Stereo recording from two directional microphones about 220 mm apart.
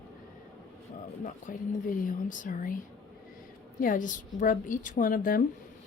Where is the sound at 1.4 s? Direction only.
40° left (ahead or behind).